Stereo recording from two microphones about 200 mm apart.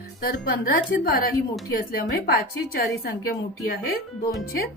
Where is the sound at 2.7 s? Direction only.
50° left (ahead or behind).